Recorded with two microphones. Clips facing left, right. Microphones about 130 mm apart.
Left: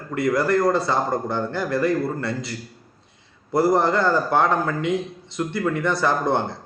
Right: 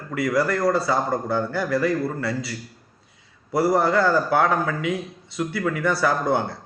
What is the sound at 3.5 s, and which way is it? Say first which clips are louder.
Speech: left 1 dB; 5° right (ahead or behind).